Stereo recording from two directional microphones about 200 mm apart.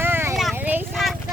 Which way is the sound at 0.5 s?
10° right (ahead or behind).